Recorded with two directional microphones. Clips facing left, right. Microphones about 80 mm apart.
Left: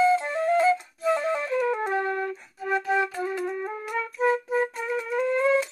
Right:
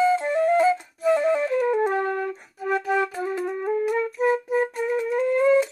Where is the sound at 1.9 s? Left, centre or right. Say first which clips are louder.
Right 2 dB; right.